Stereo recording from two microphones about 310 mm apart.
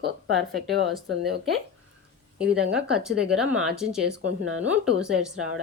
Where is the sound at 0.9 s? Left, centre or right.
Centre.